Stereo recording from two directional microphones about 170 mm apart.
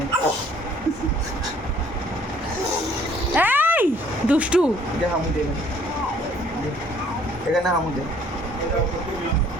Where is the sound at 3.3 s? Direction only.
10° right (ahead or behind).